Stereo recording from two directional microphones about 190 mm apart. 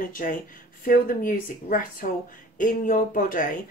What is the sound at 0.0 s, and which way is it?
A woman's voice, 45° left (ahead or behind).